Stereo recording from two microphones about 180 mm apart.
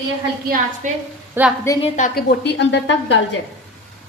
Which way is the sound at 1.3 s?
10° right (ahead or behind).